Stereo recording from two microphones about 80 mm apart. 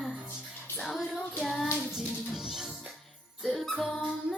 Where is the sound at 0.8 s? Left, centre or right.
Centre.